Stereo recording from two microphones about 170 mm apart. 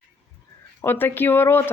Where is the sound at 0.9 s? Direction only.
15° left (ahead or behind).